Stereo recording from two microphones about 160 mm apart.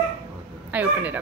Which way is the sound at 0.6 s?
10° right (ahead or behind).